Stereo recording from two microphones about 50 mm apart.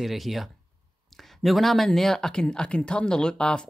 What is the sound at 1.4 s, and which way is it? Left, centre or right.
Speech, centre.